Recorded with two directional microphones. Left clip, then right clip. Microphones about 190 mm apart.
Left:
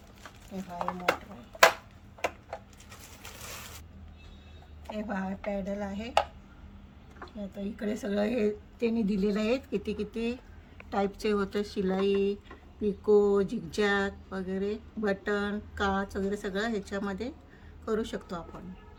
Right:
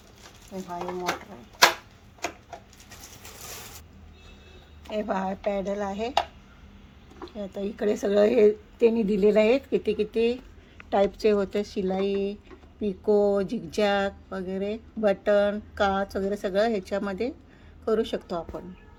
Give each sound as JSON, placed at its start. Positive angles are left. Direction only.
{"t": 4.9, "sound": "speech", "side_deg": -15}
{"t": 7.3, "sound": "speech", "side_deg": -15}